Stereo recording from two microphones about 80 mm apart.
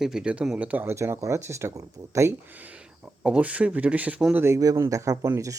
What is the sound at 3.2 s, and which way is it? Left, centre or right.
Speech, centre.